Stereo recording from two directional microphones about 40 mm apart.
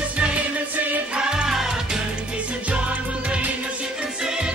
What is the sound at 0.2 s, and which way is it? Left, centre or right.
Music, right.